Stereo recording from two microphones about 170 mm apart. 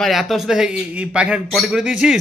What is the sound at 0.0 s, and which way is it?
A man's voice, centre (ahead or behind).